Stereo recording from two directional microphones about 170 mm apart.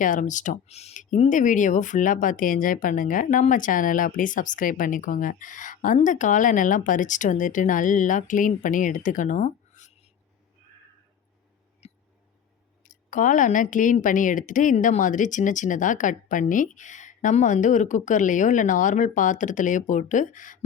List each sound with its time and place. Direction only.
0.0 s speech: 50° left (ahead or behind)
11.8 s mouse: 40° left (ahead or behind)
12.8 s speech: 50° left (ahead or behind)